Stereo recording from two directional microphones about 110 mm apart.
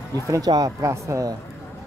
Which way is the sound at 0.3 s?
35° right (ahead or behind).